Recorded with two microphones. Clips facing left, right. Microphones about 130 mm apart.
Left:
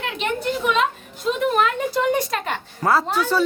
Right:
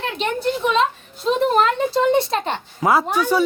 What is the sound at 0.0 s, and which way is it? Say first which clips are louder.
Speech: right 2 dB; 30° right (ahead or behind).